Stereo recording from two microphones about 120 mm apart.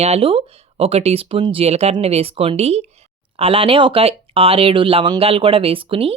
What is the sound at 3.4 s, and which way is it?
Speech, 50° right (ahead or behind).